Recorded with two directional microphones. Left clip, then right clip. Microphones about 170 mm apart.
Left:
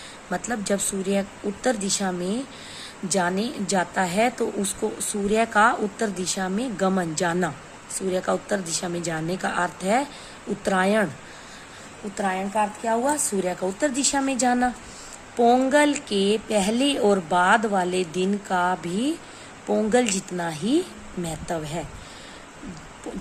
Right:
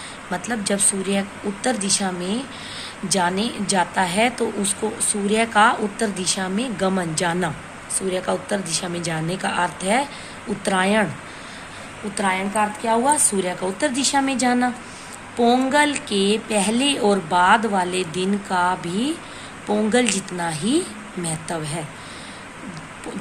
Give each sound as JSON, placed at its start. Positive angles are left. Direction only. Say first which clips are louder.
{"t": 0.3, "sound": "a woman's voice", "louder": "right 2 dB", "side_deg": 55}
{"t": 12.1, "sound": "a woman's voice", "louder": "right 3 dB", "side_deg": 45}